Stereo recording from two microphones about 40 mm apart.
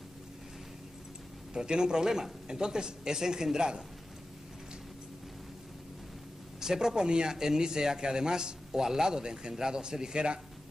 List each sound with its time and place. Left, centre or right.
1.5 s speech: centre
6.6 s speech: centre